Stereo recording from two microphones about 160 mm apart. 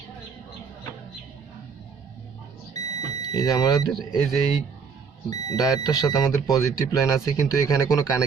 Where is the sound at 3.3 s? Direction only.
20° left (ahead or behind).